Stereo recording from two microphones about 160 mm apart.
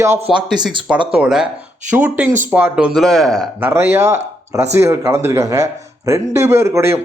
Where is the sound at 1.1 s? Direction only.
5° right (ahead or behind).